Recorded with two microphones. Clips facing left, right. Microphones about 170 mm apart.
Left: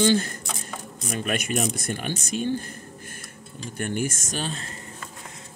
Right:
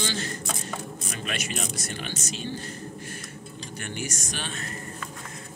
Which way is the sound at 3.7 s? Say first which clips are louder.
Left 8 dB; 50° left (ahead or behind).